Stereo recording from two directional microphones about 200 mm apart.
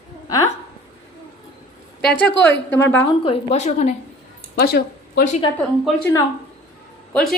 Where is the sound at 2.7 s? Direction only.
10° left (ahead or behind).